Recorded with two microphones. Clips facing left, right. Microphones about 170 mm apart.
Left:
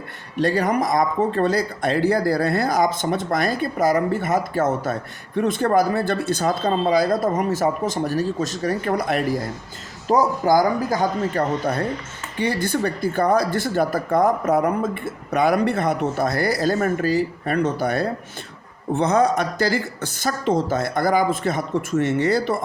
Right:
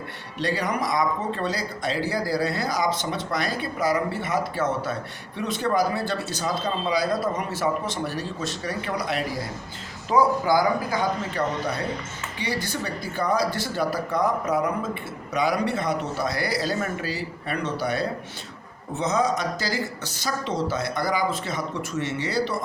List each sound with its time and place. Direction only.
0.3 s speech: 50° left (ahead or behind)